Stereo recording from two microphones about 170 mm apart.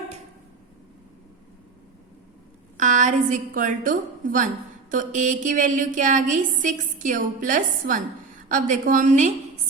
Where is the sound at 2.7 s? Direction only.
45° right (ahead or behind).